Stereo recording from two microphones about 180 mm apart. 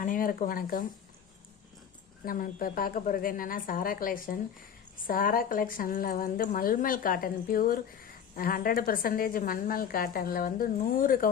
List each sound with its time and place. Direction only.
0.0 s a woman's voice: 50° left (ahead or behind)
2.2 s a woman's voice: 50° left (ahead or behind)